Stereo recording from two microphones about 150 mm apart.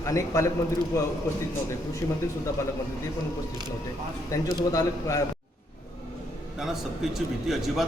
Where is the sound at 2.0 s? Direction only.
20° left (ahead or behind).